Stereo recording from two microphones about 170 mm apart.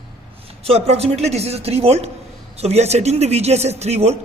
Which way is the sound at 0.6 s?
35° right (ahead or behind).